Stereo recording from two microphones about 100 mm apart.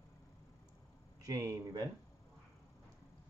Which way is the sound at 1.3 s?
35° right (ahead or behind).